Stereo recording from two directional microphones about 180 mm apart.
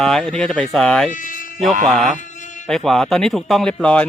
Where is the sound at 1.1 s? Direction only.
45° left (ahead or behind).